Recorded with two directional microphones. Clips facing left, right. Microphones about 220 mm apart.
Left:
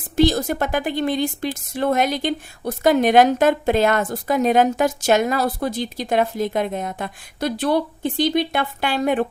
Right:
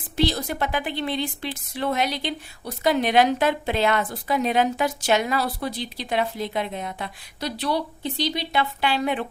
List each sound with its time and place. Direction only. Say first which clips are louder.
0.2 s a woman's voice: left 6 dB; 45° left (ahead or behind)